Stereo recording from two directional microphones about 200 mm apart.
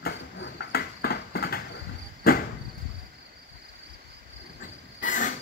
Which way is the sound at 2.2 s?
50° left (ahead or behind).